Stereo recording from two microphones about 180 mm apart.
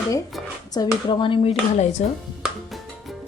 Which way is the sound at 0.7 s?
25° left (ahead or behind).